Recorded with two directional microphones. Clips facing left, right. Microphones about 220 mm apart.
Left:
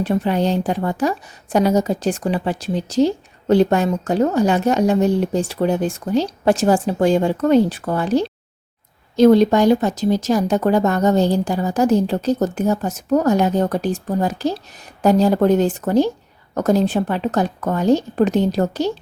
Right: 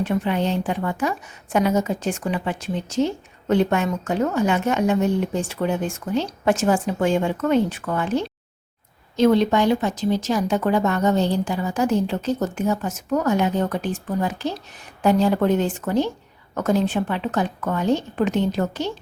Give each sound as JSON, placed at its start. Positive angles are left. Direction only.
{"t": 0.0, "sound": "a woman's voice", "side_deg": 35}